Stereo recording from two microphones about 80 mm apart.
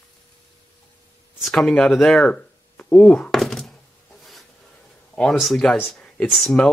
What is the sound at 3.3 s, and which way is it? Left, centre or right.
Thunk, centre.